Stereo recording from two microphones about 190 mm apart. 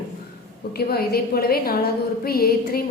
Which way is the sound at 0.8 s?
55° left (ahead or behind).